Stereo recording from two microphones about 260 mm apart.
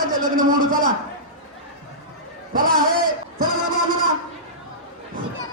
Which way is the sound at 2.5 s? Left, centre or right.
Right.